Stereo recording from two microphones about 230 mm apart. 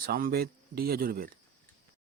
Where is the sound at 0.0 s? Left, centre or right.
Right.